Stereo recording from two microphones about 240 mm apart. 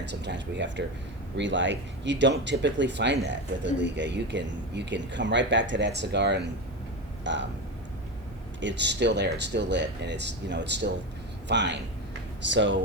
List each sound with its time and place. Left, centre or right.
0.0 s speech: right
8.6 s speech: right